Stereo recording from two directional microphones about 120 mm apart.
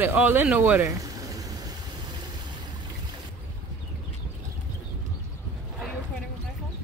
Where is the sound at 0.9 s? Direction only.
30° right (ahead or behind).